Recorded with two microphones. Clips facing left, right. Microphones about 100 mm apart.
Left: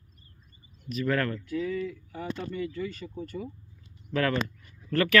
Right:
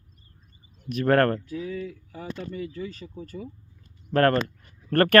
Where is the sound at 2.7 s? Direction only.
35° right (ahead or behind).